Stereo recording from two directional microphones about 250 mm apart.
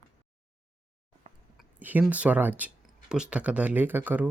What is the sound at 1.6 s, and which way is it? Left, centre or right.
Speech, centre.